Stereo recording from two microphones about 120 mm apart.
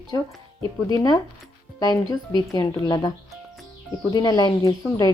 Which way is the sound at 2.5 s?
35° left (ahead or behind).